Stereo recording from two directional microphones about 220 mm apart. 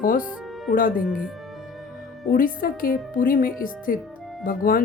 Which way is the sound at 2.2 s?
40° left (ahead or behind).